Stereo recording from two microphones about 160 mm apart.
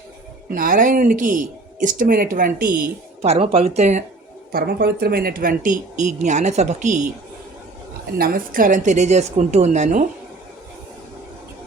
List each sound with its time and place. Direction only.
0.5 s speech: 60° right (ahead or behind)
3.2 s speech: 40° right (ahead or behind)
4.5 s speech: 70° right (ahead or behind); by 7.0 s 50° right (ahead or behind)
8.2 s a woman's voice: 60° right (ahead or behind)